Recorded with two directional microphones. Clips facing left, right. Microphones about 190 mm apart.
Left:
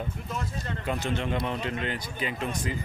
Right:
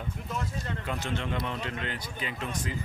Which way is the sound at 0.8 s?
15° left (ahead or behind).